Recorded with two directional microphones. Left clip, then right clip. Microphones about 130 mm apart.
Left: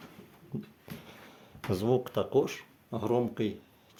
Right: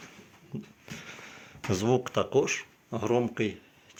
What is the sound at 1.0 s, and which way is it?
Fireworks, 10° left (ahead or behind).